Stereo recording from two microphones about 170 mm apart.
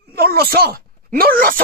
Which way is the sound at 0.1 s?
65° right (ahead or behind).